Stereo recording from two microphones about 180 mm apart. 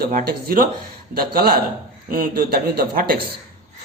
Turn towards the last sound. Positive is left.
turn(degrees=-55)  # may be behind; listen again after turning